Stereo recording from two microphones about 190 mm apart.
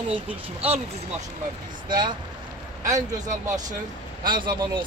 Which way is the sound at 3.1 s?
40° right (ahead or behind).